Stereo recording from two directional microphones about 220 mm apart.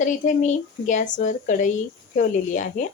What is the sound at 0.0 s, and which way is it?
A woman's voice, 35° left (ahead or behind).